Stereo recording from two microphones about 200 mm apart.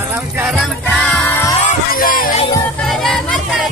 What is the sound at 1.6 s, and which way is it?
Music, 45° left (ahead or behind).